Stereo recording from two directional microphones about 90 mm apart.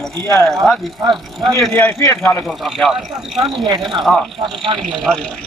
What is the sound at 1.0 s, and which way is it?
Speech, 55° right (ahead or behind).